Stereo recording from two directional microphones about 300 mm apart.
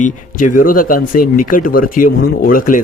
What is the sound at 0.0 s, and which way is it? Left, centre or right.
Speech, left.